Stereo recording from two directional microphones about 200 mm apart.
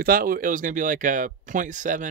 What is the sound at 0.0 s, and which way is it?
Speech, 45° right (ahead or behind).